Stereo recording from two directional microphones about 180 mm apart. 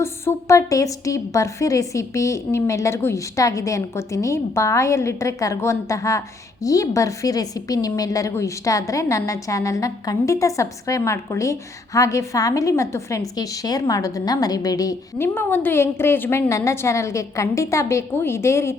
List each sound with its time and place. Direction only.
0.0 s a woman's voice: 15° left (ahead or behind)